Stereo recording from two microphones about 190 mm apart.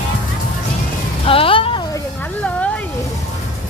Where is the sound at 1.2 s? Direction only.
30° left (ahead or behind).